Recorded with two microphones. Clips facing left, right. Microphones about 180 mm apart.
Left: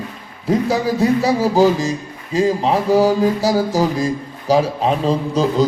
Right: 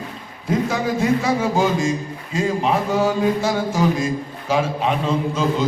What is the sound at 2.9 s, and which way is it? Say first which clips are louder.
Speech: left 7 dB; 35° left (ahead or behind).